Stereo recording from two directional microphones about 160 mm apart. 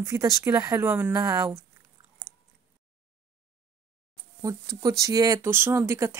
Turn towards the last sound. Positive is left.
turn(degrees=-15)  # may be behind; listen again after turning